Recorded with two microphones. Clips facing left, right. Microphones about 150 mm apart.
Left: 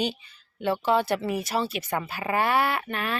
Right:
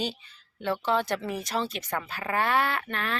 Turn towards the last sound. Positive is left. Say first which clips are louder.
# left 2 dB
turn(degrees=10)  # may be behind; listen again after turning